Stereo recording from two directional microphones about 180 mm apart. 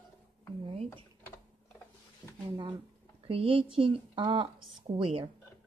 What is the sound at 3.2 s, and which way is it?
Speech, 30° right (ahead or behind).